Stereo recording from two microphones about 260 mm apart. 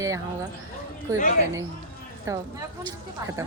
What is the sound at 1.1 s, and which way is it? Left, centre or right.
Speech, left.